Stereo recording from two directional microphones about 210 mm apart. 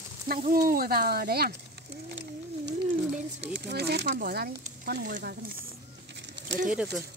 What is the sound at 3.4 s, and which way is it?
Speech, 55° right (ahead or behind).